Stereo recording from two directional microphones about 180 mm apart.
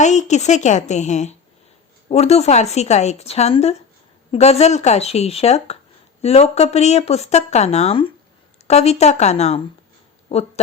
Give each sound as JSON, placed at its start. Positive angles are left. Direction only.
{"t": 0.0, "sound": "speech", "side_deg": 40}